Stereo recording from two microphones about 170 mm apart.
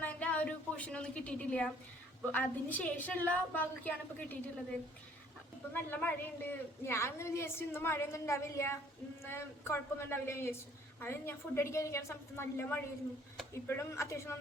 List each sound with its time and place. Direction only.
0.0 s a sound: 10° left (ahead or behind)
2.3 s a woman's voice: 10° left (ahead or behind)
5.7 s a woman's voice: 10° left (ahead or behind)